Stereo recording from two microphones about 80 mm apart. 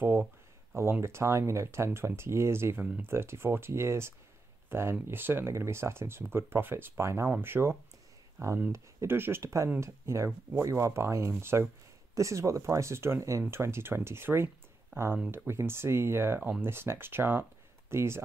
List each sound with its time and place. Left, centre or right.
1.0 s speech: right
8.4 s speech: right
8.7 s speech: right
12.2 s speech: right